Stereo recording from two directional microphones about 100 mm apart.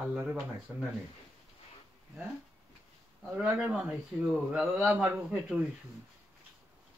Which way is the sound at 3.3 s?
10° right (ahead or behind).